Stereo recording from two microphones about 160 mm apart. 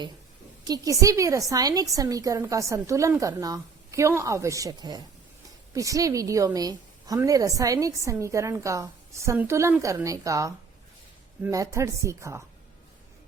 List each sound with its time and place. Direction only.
0.6 s a woman's voice: 20° right (ahead or behind)